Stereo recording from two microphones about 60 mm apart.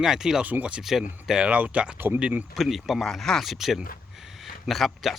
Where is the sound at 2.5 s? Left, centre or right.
Centre.